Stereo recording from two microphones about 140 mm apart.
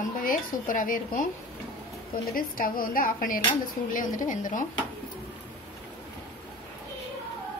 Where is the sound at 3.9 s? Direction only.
70° left (ahead or behind).